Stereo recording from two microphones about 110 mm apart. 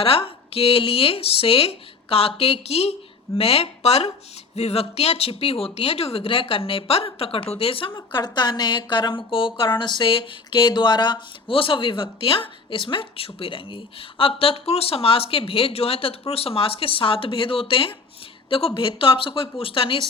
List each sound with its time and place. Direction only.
0.0 s speech: 55° left (ahead or behind)
7.9 s speech: 40° left (ahead or behind); by 20.1 s 55° left (ahead or behind)